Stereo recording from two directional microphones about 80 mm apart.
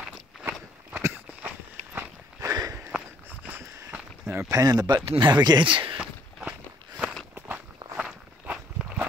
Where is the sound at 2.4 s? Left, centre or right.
Right.